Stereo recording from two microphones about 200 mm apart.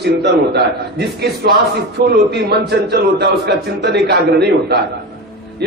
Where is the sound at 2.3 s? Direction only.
55° right (ahead or behind).